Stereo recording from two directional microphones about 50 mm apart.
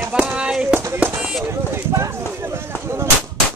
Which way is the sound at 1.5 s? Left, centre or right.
Right.